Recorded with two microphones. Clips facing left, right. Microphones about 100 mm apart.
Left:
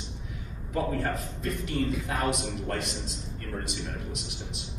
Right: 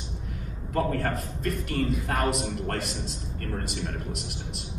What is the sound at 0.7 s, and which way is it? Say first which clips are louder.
A man's voice: right 2 dB; 50° right (ahead or behind).